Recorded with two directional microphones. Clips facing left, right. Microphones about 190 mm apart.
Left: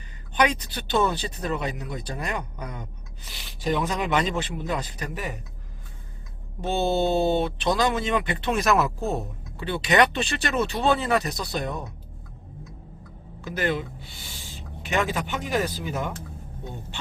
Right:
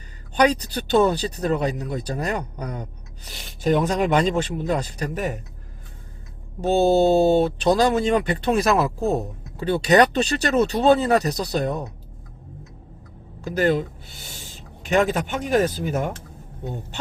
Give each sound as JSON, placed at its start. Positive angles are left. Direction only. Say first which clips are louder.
{"t": 0.3, "sound": "speech", "louder": "right 5 dB", "side_deg": -40}
{"t": 6.6, "sound": "speech", "louder": "right 7 dB", "side_deg": -45}
{"t": 13.4, "sound": "speech", "louder": "right 6 dB", "side_deg": -40}